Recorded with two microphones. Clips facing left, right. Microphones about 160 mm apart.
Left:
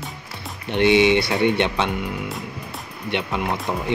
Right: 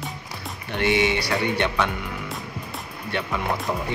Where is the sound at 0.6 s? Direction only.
20° left (ahead or behind).